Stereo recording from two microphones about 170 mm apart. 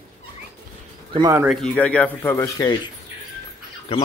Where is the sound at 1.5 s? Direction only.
Centre (ahead or behind).